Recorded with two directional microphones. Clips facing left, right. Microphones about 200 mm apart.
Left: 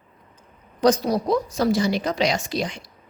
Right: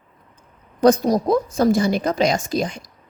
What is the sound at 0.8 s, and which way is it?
A woman's voice, 50° right (ahead or behind).